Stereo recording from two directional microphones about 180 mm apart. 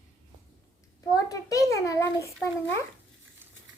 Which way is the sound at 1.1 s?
20° left (ahead or behind).